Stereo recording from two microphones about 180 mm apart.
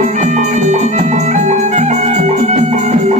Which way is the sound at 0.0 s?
40° right (ahead or behind).